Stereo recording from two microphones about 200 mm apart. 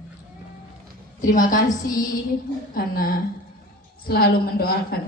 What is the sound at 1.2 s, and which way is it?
A woman's voice, 40° left (ahead or behind).